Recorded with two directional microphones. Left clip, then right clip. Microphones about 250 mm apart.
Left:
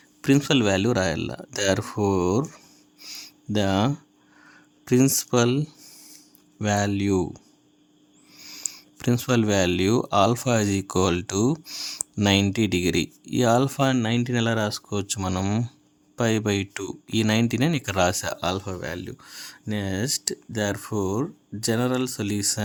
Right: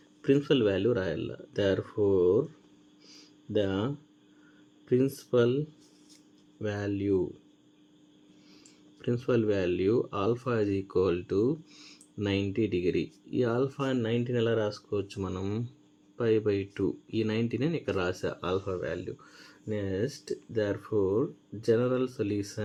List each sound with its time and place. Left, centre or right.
0.2 s speech: left
3.0 s a sound: left
4.9 s speech: left
9.0 s speech: left